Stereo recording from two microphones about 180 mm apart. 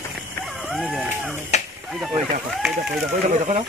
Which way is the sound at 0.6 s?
Centre (ahead or behind).